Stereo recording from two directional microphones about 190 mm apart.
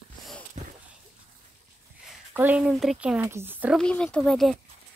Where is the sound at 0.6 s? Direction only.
35° right (ahead or behind).